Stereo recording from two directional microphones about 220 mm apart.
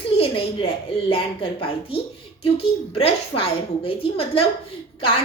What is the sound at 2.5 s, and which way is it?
A woman's voice, 25° left (ahead or behind).